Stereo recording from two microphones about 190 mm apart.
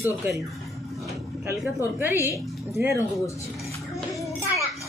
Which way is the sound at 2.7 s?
15° right (ahead or behind).